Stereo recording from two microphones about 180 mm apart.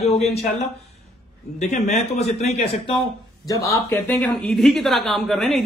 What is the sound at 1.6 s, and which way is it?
A man's voice, 40° left (ahead or behind).